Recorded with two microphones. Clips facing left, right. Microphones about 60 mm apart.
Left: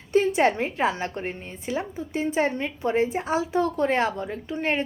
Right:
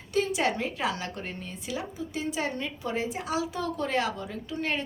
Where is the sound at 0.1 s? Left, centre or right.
Left.